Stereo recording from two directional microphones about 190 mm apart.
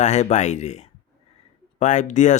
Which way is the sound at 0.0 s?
35° left (ahead or behind).